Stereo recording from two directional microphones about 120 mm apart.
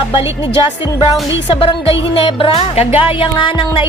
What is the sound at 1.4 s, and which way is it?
Speech, 45° left (ahead or behind).